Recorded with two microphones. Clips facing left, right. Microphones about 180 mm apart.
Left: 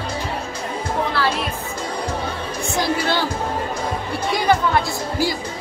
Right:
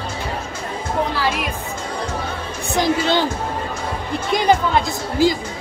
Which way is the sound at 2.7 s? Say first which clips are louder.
Right 4 dB; 20° right (ahead or behind).